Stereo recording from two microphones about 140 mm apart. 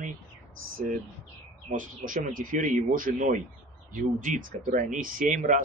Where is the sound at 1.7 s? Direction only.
75° right (ahead or behind).